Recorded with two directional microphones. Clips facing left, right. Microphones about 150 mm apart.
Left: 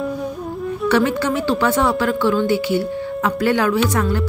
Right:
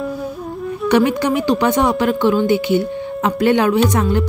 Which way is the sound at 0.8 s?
15° right (ahead or behind).